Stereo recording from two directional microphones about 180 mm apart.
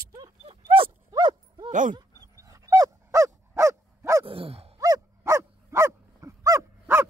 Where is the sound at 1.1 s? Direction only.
25° right (ahead or behind).